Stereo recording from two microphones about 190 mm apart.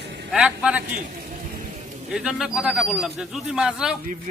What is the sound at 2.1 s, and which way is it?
Speech, 5° right (ahead or behind).